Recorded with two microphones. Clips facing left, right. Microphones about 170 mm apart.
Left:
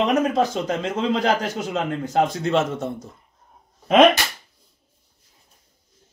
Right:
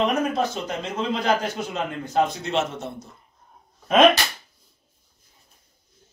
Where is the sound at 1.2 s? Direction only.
40° left (ahead or behind).